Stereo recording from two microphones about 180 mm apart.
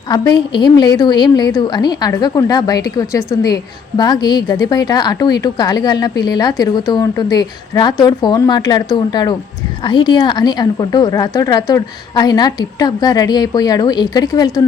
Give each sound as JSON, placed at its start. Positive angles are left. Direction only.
{"t": 0.1, "sound": "a woman's voice", "side_deg": 25}